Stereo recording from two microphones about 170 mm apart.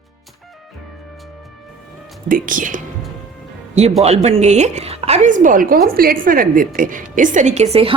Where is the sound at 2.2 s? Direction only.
55° right (ahead or behind).